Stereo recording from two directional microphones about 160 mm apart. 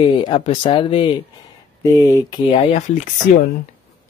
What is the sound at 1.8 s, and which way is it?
Speech, 20° left (ahead or behind).